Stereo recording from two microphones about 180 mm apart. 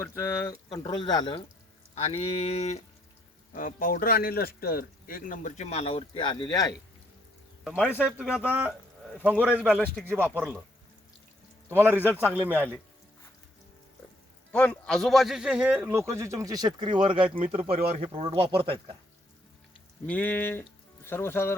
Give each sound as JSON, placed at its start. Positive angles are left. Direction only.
{"t": 0.0, "sound": "speech", "side_deg": 15}
{"t": 2.0, "sound": "speech", "side_deg": 35}
{"t": 3.5, "sound": "a man's voice", "side_deg": 45}
{"t": 7.6, "sound": "speech", "side_deg": -5}
{"t": 11.7, "sound": "speech", "side_deg": -10}
{"t": 14.5, "sound": "speech", "side_deg": 5}
{"t": 20.1, "sound": "speech", "side_deg": 10}